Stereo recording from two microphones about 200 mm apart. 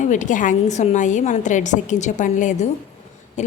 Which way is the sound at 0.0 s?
40° left (ahead or behind).